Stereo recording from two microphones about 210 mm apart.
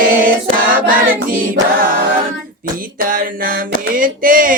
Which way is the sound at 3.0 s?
40° right (ahead or behind).